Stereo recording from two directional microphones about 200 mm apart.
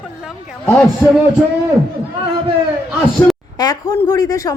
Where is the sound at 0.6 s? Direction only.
10° left (ahead or behind).